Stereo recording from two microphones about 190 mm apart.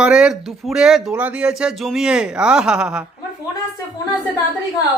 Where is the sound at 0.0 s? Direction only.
5° right (ahead or behind).